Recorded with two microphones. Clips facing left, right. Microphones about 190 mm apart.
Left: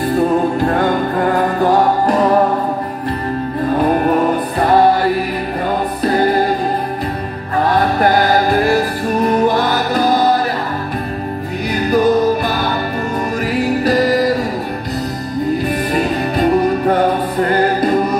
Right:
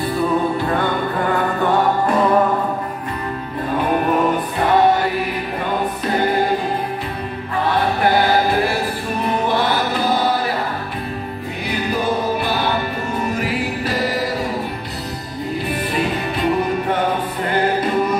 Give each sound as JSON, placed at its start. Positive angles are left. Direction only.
{"t": 0.6, "sound": "music", "side_deg": 45}
{"t": 4.6, "sound": "music", "side_deg": 40}
{"t": 6.0, "sound": "music", "side_deg": 40}
{"t": 7.5, "sound": "music", "side_deg": 45}
{"t": 11.7, "sound": "music", "side_deg": 40}
{"t": 15.9, "sound": "music", "side_deg": 40}